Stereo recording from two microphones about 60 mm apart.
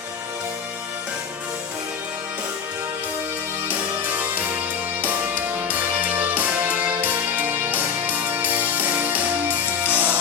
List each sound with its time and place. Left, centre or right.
3.7 s music: right
5.7 s music: right